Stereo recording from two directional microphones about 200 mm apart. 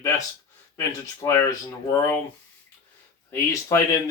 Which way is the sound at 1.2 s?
15° left (ahead or behind).